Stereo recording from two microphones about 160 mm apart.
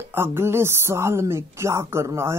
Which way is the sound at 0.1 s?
15° right (ahead or behind).